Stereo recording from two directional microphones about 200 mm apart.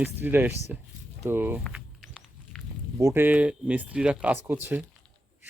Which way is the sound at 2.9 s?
15° right (ahead or behind).